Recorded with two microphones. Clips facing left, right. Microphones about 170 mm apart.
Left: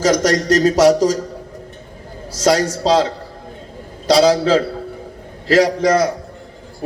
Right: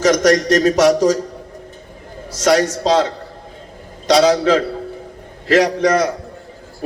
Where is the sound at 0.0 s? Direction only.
35° left (ahead or behind).